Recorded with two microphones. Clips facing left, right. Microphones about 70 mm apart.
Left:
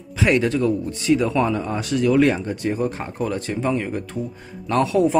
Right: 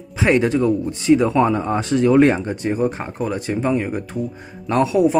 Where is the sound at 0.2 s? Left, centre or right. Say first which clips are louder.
Right 2 dB; right.